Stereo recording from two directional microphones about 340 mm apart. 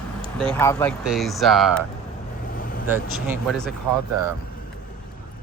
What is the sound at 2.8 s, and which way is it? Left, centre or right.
Speech, centre.